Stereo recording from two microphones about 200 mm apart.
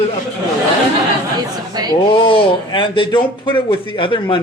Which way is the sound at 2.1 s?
25° left (ahead or behind).